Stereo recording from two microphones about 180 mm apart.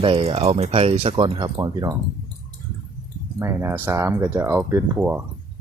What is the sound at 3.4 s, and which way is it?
Speech, 15° right (ahead or behind).